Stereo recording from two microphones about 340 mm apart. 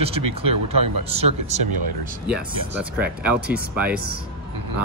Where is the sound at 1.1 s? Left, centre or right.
Centre.